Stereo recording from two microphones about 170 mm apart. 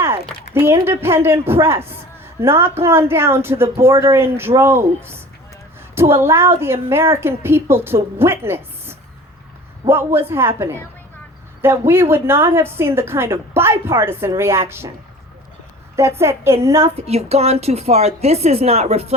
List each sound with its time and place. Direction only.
0.5 s a woman's voice: 15° right (ahead or behind)
5.9 s a woman's voice: 15° right (ahead or behind)
11.6 s a woman's voice: 15° right (ahead or behind)
16.0 s a woman's voice: 15° right (ahead or behind)
16.8 s a woman's voice: 40° right (ahead or behind)